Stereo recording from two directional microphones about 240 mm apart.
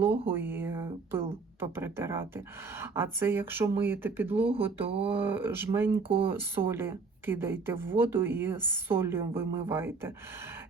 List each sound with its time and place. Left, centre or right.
0.0 s speech: centre
4.9 s speech: right
5.1 s speech: centre
6.0 s speech: right
6.2 s speech: centre